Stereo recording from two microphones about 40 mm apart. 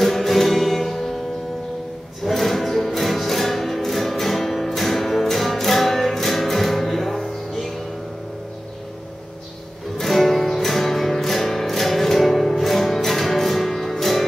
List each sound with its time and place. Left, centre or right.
0.0 s music: centre
2.2 s music: centre
9.9 s music: centre